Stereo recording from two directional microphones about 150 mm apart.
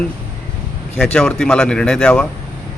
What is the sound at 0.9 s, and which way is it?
A man's voice, 5° left (ahead or behind).